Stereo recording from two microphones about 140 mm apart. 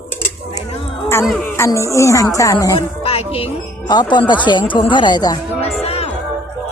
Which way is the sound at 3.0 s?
45° left (ahead or behind).